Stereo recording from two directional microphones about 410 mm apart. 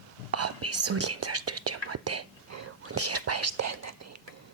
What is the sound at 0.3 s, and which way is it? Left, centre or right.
Whispering, right.